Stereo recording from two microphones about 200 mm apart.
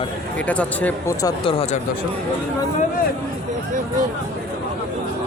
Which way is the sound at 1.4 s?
25° left (ahead or behind).